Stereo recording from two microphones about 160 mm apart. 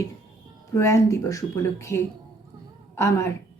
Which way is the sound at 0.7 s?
20° left (ahead or behind).